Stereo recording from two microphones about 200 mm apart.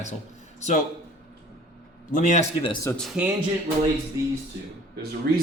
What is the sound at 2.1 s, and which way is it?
Speech, 40° left (ahead or behind).